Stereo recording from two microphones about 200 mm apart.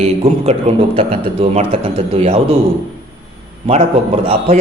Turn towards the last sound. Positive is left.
turn(degrees=-30)  # may be behind; listen again after turning